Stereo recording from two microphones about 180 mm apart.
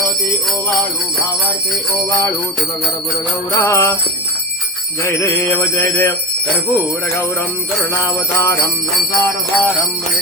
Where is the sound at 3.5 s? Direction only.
15° left (ahead or behind).